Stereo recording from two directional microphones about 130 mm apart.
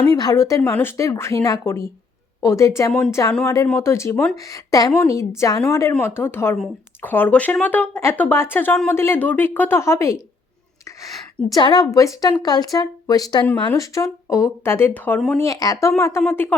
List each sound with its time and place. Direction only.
0.2 s speech: 30° left (ahead or behind)
11.4 s a woman's voice: 30° left (ahead or behind)
15.4 s speech: 25° left (ahead or behind)